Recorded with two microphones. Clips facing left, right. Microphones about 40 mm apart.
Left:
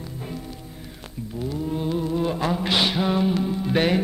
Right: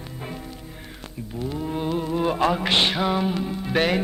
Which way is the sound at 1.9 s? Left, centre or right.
Right.